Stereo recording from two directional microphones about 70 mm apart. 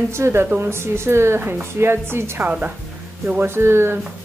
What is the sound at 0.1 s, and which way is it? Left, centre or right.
A woman's voice, right.